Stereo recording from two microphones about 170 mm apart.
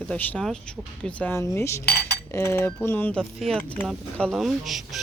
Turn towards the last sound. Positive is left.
turn(degrees=0)  # may be behind; listen again after turning